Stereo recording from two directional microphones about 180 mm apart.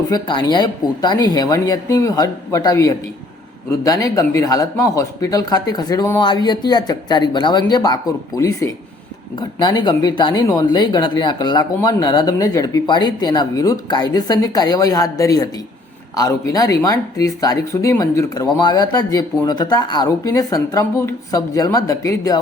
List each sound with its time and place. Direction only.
0.1 s speech: 25° left (ahead or behind)